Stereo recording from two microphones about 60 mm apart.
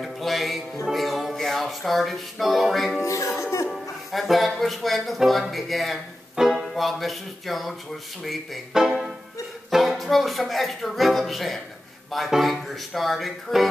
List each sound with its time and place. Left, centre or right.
0.0 s music: centre
0.9 s speech: centre
3.0 s speech: left
4.1 s speech: centre